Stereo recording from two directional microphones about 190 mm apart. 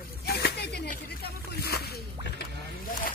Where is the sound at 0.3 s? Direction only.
55° left (ahead or behind).